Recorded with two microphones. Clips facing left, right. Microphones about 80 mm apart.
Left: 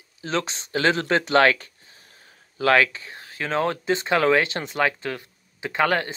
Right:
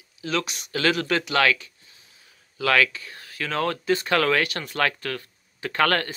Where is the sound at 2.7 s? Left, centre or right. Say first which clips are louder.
Left 2 dB; left.